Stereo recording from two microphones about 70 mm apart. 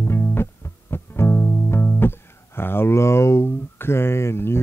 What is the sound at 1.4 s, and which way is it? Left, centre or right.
Music, left.